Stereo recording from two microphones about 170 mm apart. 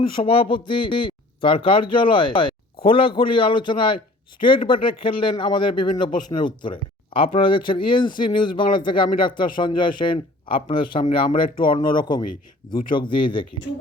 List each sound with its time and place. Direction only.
0.0 s speech: 30° left (ahead or behind)